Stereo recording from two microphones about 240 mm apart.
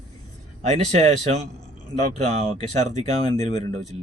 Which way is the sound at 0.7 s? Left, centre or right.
Right.